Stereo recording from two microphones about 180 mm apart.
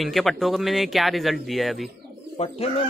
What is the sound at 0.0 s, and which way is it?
Speech, centre (ahead or behind).